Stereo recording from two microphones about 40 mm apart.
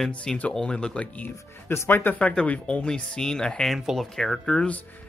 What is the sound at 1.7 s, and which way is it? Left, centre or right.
Speech, left.